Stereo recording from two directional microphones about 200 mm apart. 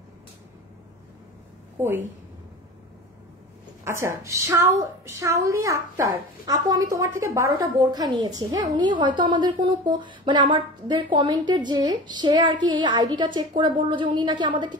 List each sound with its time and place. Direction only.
1.8 s a woman's voice: 10° right (ahead or behind)
3.8 s a woman's voice: 15° right (ahead or behind)